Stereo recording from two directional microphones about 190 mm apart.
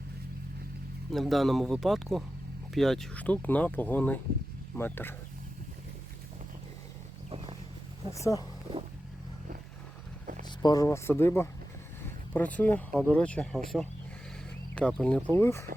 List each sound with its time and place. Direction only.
1.1 s speech: centre (ahead or behind)
7.3 s a sound: 30° right (ahead or behind)
8.1 s speech: 15° left (ahead or behind)
10.6 s speech: 20° left (ahead or behind)
12.5 s speech: 10° left (ahead or behind)